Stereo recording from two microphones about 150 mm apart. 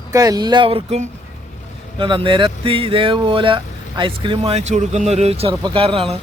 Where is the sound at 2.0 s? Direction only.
35° right (ahead or behind).